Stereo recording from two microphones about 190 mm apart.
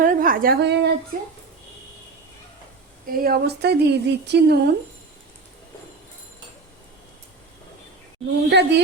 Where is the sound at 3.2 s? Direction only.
55° right (ahead or behind).